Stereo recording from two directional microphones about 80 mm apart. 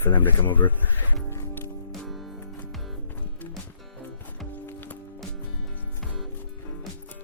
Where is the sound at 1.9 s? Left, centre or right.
Centre.